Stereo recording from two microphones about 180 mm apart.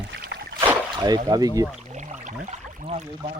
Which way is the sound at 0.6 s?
10° right (ahead or behind).